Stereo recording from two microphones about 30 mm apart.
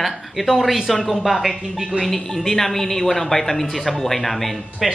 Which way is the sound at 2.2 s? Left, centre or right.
Centre.